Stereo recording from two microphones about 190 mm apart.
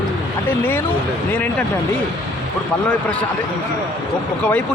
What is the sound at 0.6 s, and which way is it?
Speech, 10° left (ahead or behind).